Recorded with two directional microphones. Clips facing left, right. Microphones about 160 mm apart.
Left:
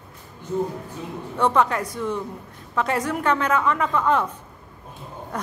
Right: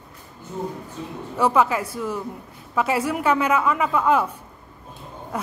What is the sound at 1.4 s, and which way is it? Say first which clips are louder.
A woman's voice: right 1 dB; 5° right (ahead or behind).